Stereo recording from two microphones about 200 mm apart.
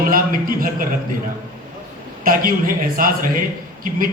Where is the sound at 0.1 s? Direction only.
45° right (ahead or behind).